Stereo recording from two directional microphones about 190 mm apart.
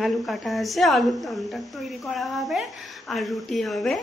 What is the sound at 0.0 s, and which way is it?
A woman's voice, centre (ahead or behind).